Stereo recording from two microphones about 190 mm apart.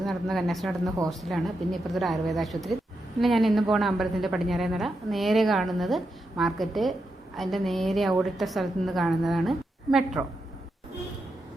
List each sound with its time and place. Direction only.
0.0 s a woman's voice: centre (ahead or behind)